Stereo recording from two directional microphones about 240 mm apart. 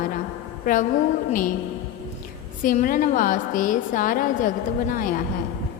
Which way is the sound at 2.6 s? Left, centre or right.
Left.